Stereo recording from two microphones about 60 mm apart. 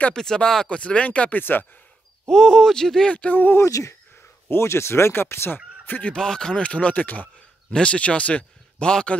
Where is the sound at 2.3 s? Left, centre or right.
Centre.